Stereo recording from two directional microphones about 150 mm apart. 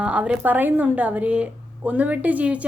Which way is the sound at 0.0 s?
10° right (ahead or behind).